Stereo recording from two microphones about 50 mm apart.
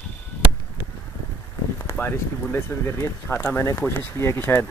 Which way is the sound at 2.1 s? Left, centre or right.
Left.